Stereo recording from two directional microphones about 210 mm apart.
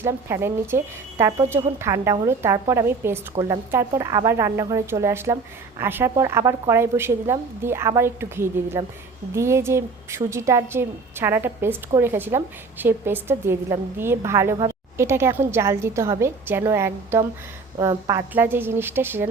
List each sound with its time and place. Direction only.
0.0 s a woman's voice: 10° right (ahead or behind)
3.4 s a woman's voice: 30° right (ahead or behind)
3.7 s a woman's voice: 10° right (ahead or behind)